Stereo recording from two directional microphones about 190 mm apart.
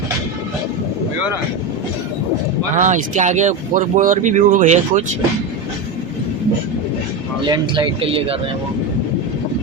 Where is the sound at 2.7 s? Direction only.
40° right (ahead or behind).